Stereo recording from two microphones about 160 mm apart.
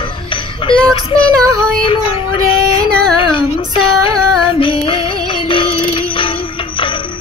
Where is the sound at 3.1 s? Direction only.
35° left (ahead or behind).